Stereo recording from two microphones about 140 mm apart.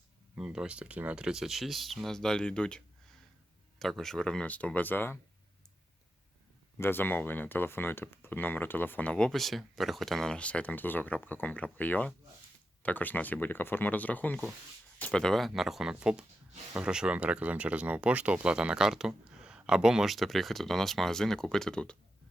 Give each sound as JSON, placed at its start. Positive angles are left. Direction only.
{"t": 0.3, "sound": "speech", "side_deg": -5}
{"t": 6.7, "sound": "speech", "side_deg": 15}